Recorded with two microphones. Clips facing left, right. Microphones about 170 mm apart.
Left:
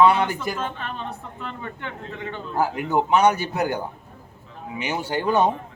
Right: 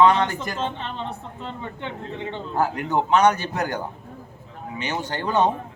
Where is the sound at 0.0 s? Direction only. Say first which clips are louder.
Even; 10° left (ahead or behind).